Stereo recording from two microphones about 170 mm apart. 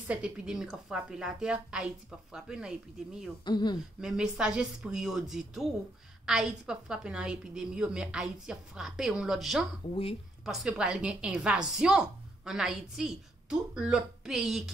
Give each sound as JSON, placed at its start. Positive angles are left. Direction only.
{"t": 0.1, "sound": "a woman's voice", "side_deg": -5}
{"t": 3.4, "sound": "speech", "side_deg": 25}
{"t": 4.0, "sound": "a woman's voice", "side_deg": -5}